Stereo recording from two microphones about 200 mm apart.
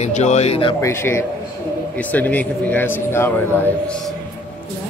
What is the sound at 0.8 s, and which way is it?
A man's voice, 15° left (ahead or behind).